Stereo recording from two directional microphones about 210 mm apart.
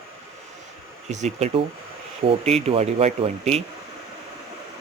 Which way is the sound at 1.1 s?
35° right (ahead or behind).